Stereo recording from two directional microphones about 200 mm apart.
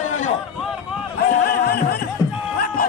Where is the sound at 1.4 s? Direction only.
50° left (ahead or behind).